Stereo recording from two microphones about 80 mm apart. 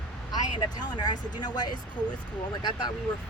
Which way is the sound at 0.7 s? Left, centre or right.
Left.